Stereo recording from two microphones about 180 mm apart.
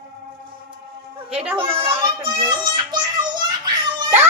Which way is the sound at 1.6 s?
30° right (ahead or behind).